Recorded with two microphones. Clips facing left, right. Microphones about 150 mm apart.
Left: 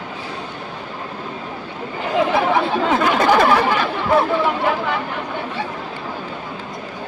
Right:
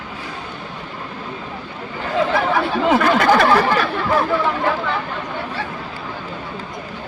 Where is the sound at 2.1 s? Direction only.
20° left (ahead or behind).